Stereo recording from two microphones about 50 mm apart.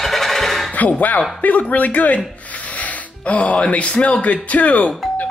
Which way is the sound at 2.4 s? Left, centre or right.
Left.